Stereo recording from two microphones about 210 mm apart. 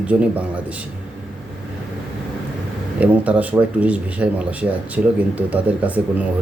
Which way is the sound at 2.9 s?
5° right (ahead or behind).